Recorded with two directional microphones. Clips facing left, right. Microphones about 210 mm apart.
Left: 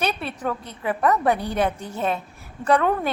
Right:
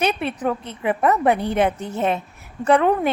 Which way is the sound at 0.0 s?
20° right (ahead or behind).